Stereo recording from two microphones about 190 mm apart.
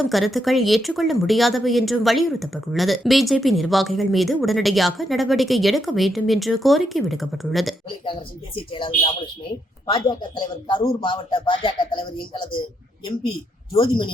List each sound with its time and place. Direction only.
0.1 s speech: centre (ahead or behind)
8.5 s speech: 25° left (ahead or behind)
13.7 s speech: 25° left (ahead or behind)